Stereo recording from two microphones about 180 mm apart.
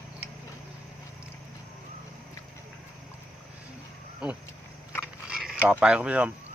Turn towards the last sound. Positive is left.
turn(degrees=-10)  # may be behind; listen again after turning